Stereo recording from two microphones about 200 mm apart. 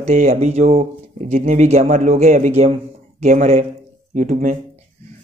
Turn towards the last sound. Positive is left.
turn(degrees=-40)  # may be behind; listen again after turning